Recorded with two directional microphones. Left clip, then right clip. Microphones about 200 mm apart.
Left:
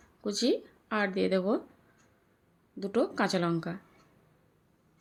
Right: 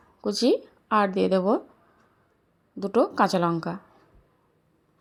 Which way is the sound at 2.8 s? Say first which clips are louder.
Right 7 dB; 20° right (ahead or behind).